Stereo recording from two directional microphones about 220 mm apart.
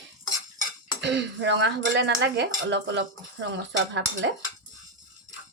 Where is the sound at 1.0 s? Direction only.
55° right (ahead or behind).